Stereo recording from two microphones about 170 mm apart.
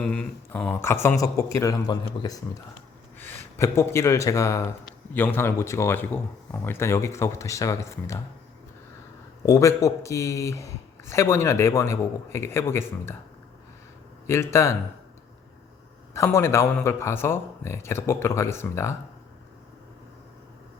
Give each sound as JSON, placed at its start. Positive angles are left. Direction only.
{"t": 0.0, "sound": "speech", "side_deg": 10}
{"t": 9.5, "sound": "speech", "side_deg": 15}
{"t": 14.3, "sound": "speech", "side_deg": 15}
{"t": 16.1, "sound": "speech", "side_deg": 15}